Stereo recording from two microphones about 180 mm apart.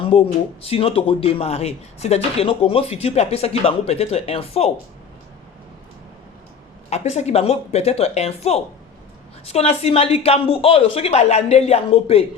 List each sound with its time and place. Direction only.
0.0 s speech: 30° left (ahead or behind)
6.9 s speech: 40° left (ahead or behind)